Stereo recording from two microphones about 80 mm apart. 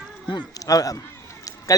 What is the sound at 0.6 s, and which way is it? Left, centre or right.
Speech, left.